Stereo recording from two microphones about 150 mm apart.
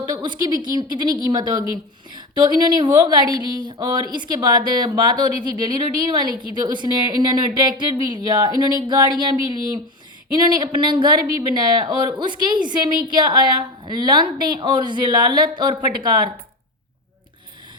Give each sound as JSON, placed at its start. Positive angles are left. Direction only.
{"t": 0.2, "sound": "speech", "side_deg": -30}